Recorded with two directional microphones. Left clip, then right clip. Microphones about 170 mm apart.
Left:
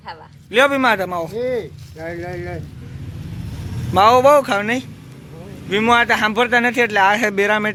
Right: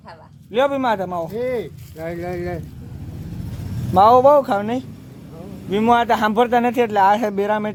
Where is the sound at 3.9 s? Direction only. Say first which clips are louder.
Even; 20° right (ahead or behind).